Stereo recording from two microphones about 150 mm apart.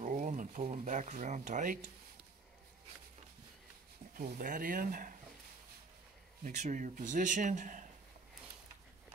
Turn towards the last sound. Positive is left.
turn(degrees=-55)  # may be behind; listen again after turning